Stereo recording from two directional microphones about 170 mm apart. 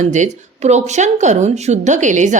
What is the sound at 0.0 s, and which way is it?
A woman's voice, 45° right (ahead or behind).